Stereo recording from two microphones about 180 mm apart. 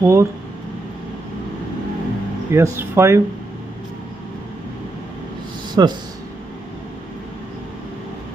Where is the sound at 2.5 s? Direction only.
15° right (ahead or behind).